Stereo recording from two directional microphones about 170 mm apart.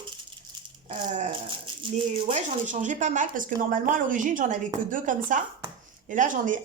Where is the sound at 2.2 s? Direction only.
45° right (ahead or behind).